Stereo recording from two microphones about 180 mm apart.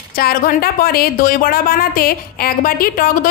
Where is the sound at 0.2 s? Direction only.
55° left (ahead or behind).